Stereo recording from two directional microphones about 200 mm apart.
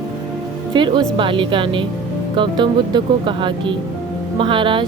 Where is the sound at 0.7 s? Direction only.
25° right (ahead or behind).